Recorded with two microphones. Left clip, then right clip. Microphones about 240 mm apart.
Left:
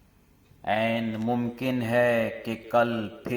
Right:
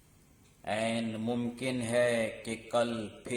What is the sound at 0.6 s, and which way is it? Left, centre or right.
Speech, centre.